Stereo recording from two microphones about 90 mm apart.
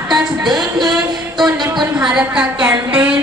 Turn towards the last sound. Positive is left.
turn(degrees=-15)  # may be behind; listen again after turning